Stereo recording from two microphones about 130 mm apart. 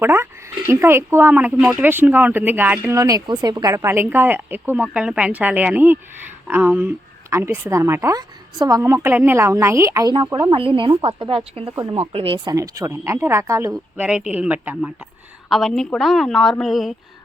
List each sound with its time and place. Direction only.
0.0 s speech: 15° right (ahead or behind)
2.9 s speech: 25° right (ahead or behind)
10.5 s a woman's voice: 45° right (ahead or behind)
12.5 s speech: 25° right (ahead or behind)
13.9 s speech: 10° right (ahead or behind)
15.4 s a woman's voice: centre (ahead or behind)